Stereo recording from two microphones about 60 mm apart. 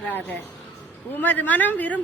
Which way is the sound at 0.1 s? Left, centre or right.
Left.